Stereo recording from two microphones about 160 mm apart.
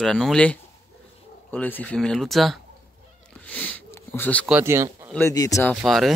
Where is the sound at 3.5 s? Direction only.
10° left (ahead or behind).